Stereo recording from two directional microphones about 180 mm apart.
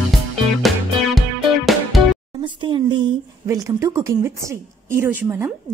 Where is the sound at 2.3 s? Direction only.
25° right (ahead or behind).